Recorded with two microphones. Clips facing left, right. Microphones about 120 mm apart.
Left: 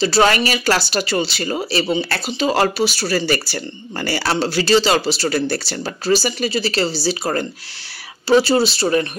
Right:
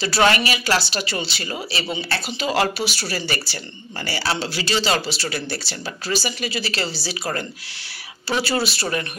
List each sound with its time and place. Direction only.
0.0 s speech: 30° left (ahead or behind)